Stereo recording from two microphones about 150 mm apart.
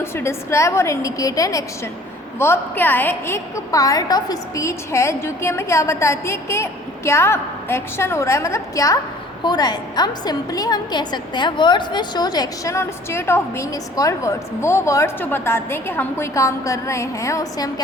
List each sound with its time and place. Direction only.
0.0 s a woman's voice: 15° left (ahead or behind)